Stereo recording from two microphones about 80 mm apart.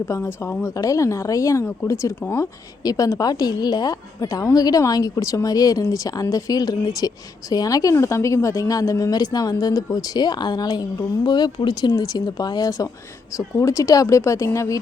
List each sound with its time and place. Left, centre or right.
0.1 s speech: left
0.6 s a woman's voice: left